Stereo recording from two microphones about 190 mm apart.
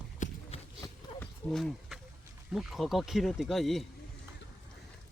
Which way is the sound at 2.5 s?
Centre (ahead or behind).